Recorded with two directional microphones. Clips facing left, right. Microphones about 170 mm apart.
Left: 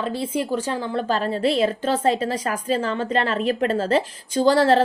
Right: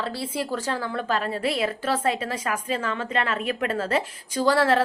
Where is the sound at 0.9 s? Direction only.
30° left (ahead or behind).